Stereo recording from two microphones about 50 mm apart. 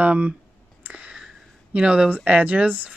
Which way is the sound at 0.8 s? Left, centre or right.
Right.